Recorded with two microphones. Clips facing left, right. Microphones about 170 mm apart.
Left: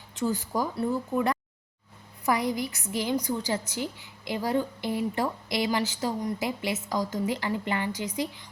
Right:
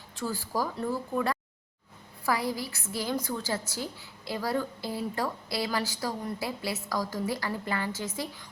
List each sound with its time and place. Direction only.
0.2 s a woman's voice: 20° left (ahead or behind)